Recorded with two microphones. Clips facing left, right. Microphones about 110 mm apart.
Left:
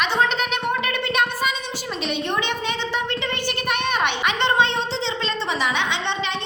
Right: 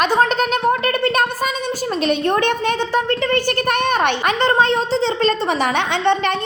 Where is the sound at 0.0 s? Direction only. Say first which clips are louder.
Right 5 dB; 45° right (ahead or behind).